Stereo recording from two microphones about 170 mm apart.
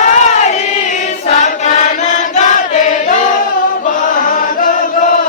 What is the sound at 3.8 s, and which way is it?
Chant, 55° left (ahead or behind).